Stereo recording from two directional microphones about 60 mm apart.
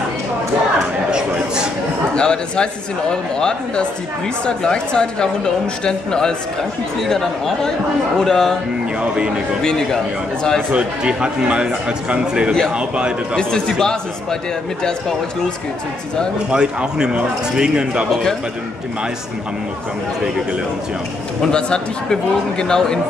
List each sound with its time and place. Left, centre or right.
1.1 s a sound: centre
2.1 s a woman's voice: centre
9.0 s speech: centre
10.7 s speech: centre
13.4 s a woman's voice: centre
16.4 s speech: centre
21.4 s a woman's voice: centre